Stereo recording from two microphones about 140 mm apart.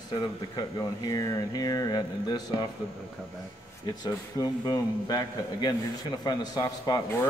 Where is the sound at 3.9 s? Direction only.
30° left (ahead or behind).